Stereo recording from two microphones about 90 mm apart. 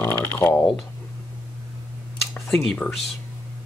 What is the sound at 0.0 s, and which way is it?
Typing, 20° left (ahead or behind).